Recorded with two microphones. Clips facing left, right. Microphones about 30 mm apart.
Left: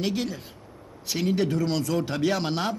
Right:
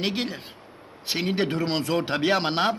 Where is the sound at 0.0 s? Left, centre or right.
Right.